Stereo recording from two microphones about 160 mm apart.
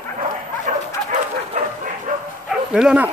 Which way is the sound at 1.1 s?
50° right (ahead or behind).